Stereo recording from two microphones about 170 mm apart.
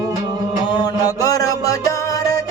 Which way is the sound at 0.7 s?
25° left (ahead or behind).